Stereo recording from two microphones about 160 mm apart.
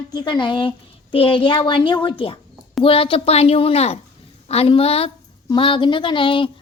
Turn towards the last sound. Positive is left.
turn(degrees=30)  # may be behind; listen again after turning